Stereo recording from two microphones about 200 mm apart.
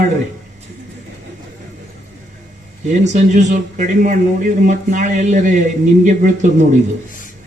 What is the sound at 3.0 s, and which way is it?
Speech, 35° right (ahead or behind).